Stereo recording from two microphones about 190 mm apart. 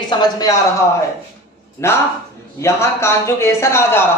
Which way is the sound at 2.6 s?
15° left (ahead or behind).